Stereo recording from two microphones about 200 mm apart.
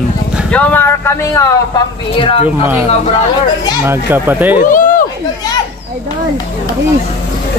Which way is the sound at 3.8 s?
10° right (ahead or behind).